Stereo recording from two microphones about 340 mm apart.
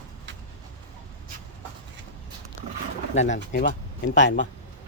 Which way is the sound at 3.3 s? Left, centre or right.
Left.